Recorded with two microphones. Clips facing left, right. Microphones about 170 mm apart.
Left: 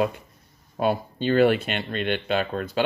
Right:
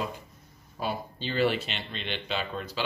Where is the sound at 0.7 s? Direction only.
55° left (ahead or behind).